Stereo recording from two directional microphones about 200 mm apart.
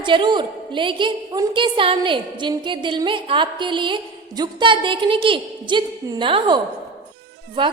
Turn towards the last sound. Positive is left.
turn(degrees=-25)  # may be behind; listen again after turning